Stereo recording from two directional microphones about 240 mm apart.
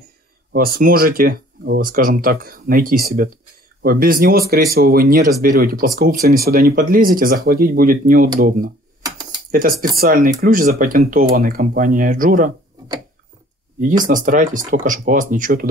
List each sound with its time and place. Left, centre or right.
0.5 s speech: right
9.0 s typing: centre
9.5 s speech: right
14.0 s speech: right